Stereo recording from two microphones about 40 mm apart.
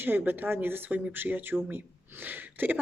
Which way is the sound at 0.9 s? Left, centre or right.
Right.